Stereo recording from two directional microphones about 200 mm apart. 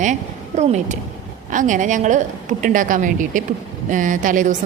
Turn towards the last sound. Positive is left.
turn(degrees=-40)  # may be behind; listen again after turning